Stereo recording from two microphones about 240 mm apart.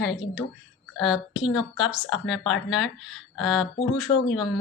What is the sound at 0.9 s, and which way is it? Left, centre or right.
Speech, centre.